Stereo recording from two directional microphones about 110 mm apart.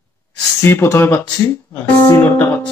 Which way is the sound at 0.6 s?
25° left (ahead or behind).